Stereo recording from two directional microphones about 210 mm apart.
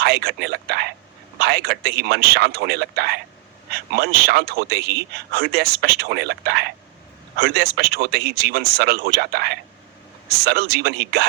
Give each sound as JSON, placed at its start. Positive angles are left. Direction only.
{"t": 0.0, "sound": "a man's voice", "side_deg": -50}